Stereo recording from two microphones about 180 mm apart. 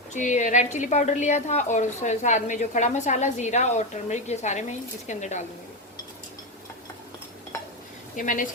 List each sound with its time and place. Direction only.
0.1 s a woman's voice: 45° left (ahead or behind)
8.1 s speech: 45° left (ahead or behind)